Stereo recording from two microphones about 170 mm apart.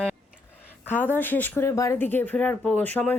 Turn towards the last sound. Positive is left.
turn(degrees=10)  # may be behind; listen again after turning